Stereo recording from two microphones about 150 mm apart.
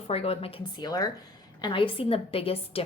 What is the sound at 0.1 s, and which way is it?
Speech, 40° left (ahead or behind).